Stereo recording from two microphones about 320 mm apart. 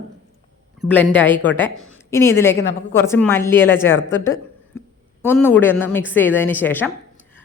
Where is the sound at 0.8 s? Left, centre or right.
Centre.